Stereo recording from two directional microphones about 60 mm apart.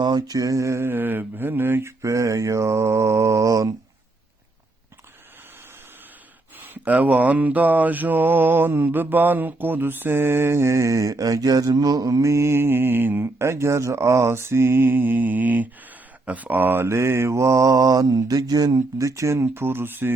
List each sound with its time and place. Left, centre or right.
0.2 s mantra: right
0.9 s mantra: right
2.0 s mantra: right
6.8 s mantra: right
13.2 s mantra: right